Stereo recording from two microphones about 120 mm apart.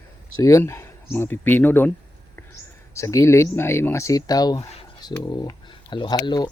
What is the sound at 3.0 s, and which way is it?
Speech, 25° left (ahead or behind).